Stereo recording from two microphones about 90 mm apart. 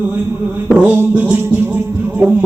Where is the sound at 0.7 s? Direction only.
20° right (ahead or behind).